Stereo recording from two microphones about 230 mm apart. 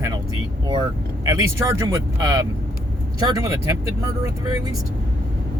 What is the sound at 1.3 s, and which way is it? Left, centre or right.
Speech, centre.